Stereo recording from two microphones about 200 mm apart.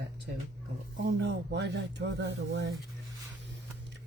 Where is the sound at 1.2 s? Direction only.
60° right (ahead or behind).